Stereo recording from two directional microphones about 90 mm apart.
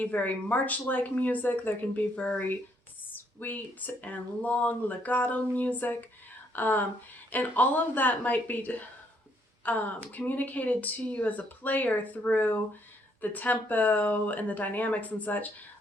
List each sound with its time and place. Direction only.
0.0 s speech: 15° left (ahead or behind)